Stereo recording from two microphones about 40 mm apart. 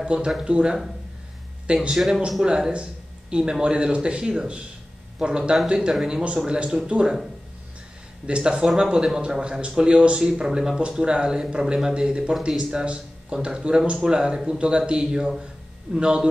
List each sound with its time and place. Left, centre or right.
0.0 s speech: right
2.0 s a man's voice: centre
2.4 s speech: centre
2.7 s a sound: right
3.6 s speech: right
8.3 s speech: right
9.4 s speech: right